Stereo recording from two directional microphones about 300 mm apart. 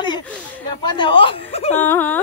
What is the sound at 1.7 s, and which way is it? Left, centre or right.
Speech, centre.